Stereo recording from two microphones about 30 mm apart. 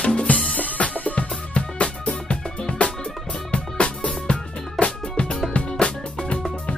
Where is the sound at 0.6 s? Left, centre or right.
Left.